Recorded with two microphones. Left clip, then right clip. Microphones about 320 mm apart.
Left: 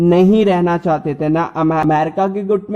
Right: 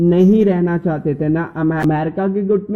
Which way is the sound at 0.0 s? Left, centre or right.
Centre.